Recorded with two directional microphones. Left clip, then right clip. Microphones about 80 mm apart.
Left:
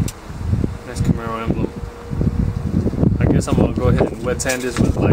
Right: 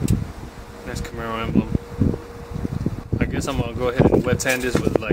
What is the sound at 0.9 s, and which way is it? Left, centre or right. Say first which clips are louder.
Speech: left 2 dB; right.